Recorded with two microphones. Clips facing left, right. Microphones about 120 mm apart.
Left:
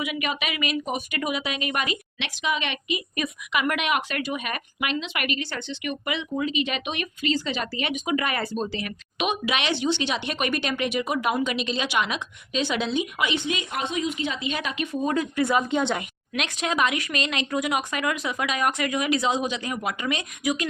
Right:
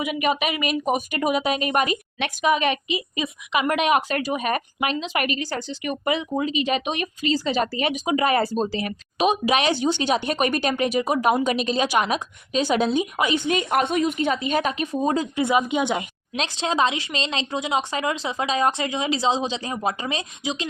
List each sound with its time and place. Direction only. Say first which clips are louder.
0.0 s a woman's voice: right 6 dB; 40° right (ahead or behind); by 16.0 s 15° right (ahead or behind)
16.3 s speech: right 2 dB; 30° right (ahead or behind)